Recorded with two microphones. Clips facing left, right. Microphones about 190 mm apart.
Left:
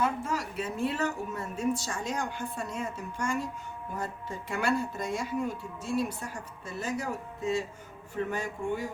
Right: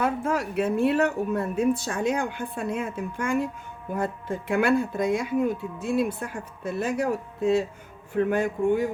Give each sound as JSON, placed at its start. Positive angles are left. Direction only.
{"t": 0.0, "sound": "speech", "side_deg": -55}